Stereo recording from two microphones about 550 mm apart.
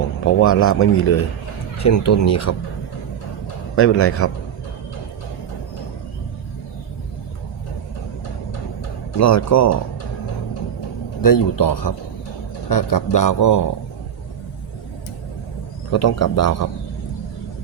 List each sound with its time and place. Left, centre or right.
0.3 s speech: left
3.8 s speech: left
9.1 s speech: left
11.2 s speech: left
15.9 s speech: left